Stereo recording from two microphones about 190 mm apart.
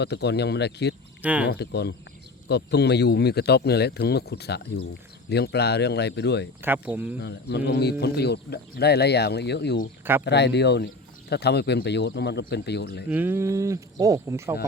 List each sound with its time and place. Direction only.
0.0 s speech: 60° left (ahead or behind)
1.2 s speech: 10° right (ahead or behind)
1.5 s speech: 60° left (ahead or behind)
6.6 s speech: 10° right (ahead or behind)
7.2 s speech: 65° left (ahead or behind)
10.0 s speech: 10° right (ahead or behind)
10.2 s speech: 65° left (ahead or behind)
13.1 s speech: 10° right (ahead or behind)